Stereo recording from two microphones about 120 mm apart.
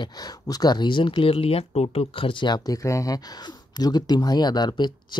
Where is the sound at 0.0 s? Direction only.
35° left (ahead or behind).